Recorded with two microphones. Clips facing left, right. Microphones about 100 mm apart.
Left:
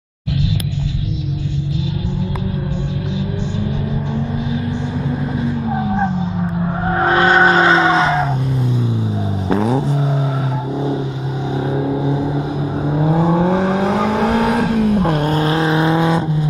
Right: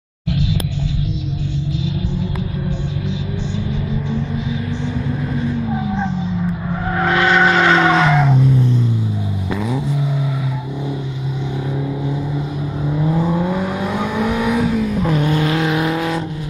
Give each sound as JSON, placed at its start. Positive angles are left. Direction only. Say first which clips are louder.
{"t": 5.7, "sound": "vehicle", "louder": "left 3 dB", "side_deg": 35}
{"t": 8.3, "sound": "music", "louder": "right 4 dB", "side_deg": 5}
{"t": 9.5, "sound": "vehicle", "louder": "left 6 dB", "side_deg": 35}
{"t": 11.7, "sound": "vehicle", "louder": "left 6 dB", "side_deg": 40}